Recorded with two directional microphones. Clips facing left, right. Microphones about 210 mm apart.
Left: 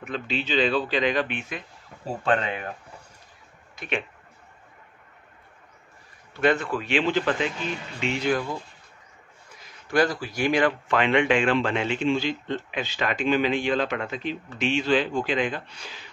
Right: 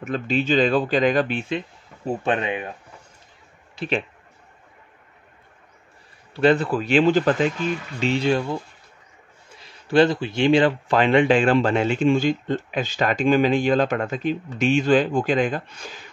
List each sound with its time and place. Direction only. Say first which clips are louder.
0.0 s speech: right 6 dB; 45° right (ahead or behind)
2.2 s speech: even; 20° right (ahead or behind)
3.7 s speech: right 5 dB; 30° right (ahead or behind)
6.3 s speech: right 5 dB; 30° right (ahead or behind)